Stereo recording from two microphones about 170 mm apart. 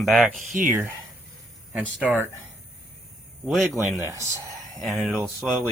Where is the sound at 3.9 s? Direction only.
15° right (ahead or behind).